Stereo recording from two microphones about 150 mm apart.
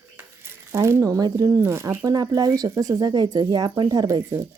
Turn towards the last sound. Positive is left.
turn(degrees=-20)  # may be behind; listen again after turning